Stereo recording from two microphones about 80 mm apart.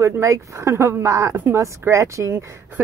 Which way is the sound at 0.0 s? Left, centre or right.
Right.